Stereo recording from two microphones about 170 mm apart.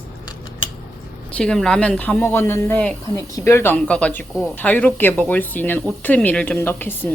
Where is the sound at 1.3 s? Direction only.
5° left (ahead or behind).